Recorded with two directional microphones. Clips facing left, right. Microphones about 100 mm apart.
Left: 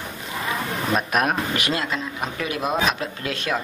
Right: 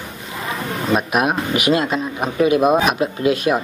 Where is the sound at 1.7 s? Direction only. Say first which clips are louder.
Right 7 dB; 20° right (ahead or behind).